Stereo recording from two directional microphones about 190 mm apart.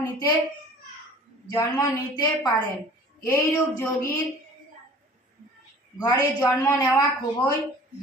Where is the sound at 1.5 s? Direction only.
20° left (ahead or behind).